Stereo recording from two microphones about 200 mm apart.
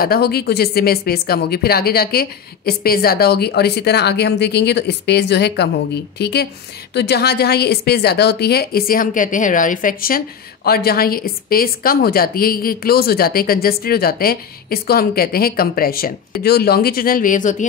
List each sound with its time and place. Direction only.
0.0 s speech: 50° left (ahead or behind)